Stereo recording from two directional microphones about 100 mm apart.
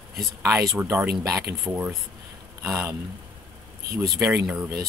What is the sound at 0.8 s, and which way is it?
Speech, 20° right (ahead or behind).